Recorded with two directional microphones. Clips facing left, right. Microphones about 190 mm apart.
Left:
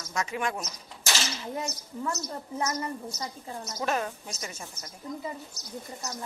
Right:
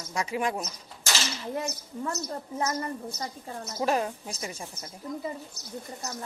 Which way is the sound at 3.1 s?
55° right (ahead or behind).